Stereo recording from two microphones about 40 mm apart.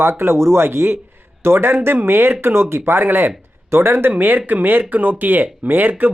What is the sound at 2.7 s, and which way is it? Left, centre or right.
Speech, right.